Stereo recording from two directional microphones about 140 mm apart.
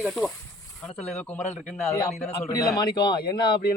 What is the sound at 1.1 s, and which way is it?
Speech, 10° left (ahead or behind).